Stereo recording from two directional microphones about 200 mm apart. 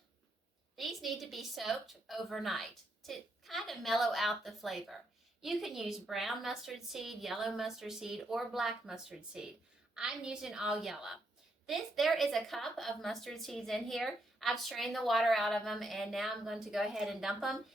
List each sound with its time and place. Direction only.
0.8 s a woman's voice: centre (ahead or behind)